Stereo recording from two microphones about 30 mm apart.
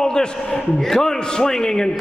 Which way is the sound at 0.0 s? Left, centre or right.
Left.